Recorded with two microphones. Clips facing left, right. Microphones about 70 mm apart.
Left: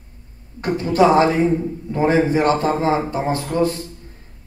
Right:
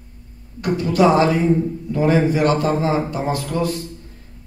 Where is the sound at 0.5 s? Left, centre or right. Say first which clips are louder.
Left 1 dB; left.